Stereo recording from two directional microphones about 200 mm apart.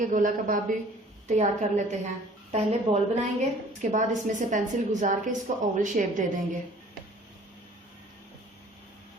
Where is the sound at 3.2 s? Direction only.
35° right (ahead or behind).